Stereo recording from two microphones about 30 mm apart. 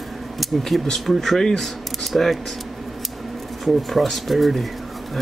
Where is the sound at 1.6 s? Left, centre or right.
Centre.